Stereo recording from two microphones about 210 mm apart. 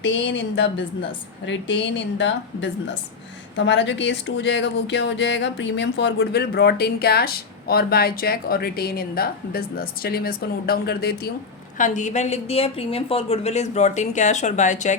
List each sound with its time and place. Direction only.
0.0 s a woman's voice: 65° left (ahead or behind)
11.8 s a woman's voice: 35° left (ahead or behind)